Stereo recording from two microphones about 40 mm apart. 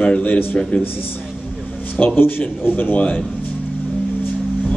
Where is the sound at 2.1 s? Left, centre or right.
Left.